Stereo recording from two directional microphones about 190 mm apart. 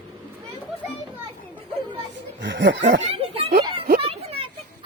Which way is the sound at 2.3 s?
70° right (ahead or behind).